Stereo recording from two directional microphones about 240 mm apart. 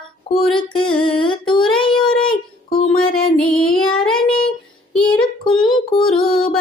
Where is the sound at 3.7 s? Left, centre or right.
Centre.